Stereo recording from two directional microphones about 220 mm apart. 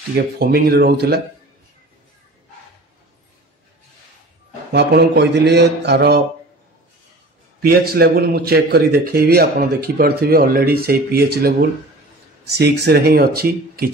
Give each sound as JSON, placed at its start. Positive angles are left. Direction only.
{"t": 0.1, "sound": "a man's voice", "side_deg": -45}
{"t": 4.7, "sound": "a man's voice", "side_deg": -50}
{"t": 7.6, "sound": "a man's voice", "side_deg": -45}
{"t": 12.5, "sound": "a man's voice", "side_deg": -50}